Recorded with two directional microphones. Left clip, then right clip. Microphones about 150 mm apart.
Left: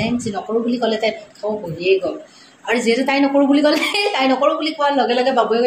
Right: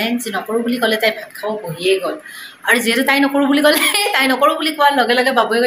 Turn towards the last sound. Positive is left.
turn(degrees=0)  # may be behind; listen again after turning